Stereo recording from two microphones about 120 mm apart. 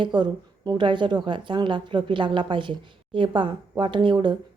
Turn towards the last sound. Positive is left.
turn(degrees=-40)  # may be behind; listen again after turning